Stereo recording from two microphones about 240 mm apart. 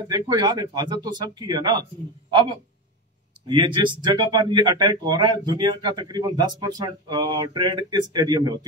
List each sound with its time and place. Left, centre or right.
0.1 s speech: centre
3.4 s speech: centre